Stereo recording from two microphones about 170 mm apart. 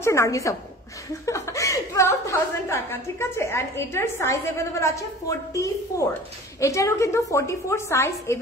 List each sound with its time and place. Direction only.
0.0 s a woman's voice: 15° left (ahead or behind)